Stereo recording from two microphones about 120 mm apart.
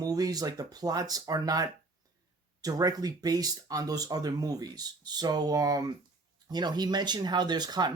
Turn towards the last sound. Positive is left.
turn(degrees=-35)  # may be behind; listen again after turning